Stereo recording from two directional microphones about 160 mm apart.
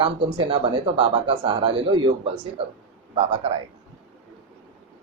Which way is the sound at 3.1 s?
35° right (ahead or behind).